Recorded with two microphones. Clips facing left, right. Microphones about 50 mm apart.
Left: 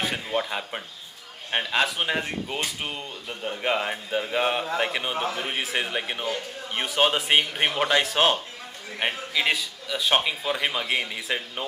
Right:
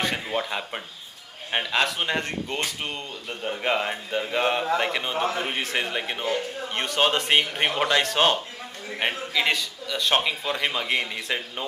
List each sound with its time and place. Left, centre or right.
0.1 s a man's voice: centre